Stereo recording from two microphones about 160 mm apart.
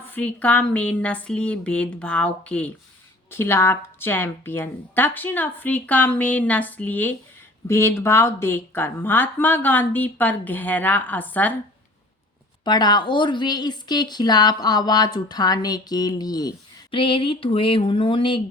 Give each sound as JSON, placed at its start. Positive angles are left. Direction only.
{"t": 0.1, "sound": "a woman's voice", "side_deg": 10}
{"t": 12.6, "sound": "speech", "side_deg": 25}